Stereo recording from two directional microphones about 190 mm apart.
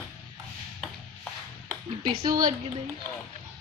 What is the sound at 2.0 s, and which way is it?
Speech, 20° right (ahead or behind).